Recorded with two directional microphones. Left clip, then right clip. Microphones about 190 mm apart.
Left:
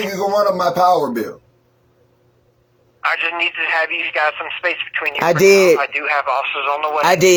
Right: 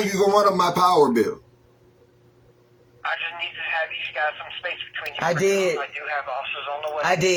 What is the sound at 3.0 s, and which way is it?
Speech, 45° left (ahead or behind).